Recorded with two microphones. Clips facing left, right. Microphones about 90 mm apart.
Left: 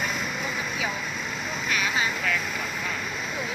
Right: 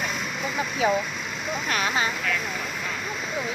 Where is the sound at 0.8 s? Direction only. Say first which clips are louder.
Right 12 dB; 20° right (ahead or behind).